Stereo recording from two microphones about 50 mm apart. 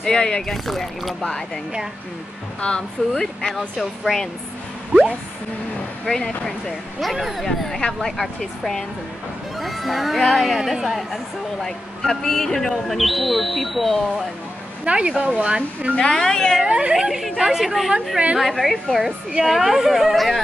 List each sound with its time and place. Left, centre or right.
0.0 s speech: centre
2.6 s speech: left
3.1 s speech: centre
6.0 s speech: centre
7.0 s speech: centre
7.4 s speech: centre
11.6 s speech: centre
14.9 s speech: centre
16.0 s speech: centre
16.6 s speech: right
16.9 s speech: centre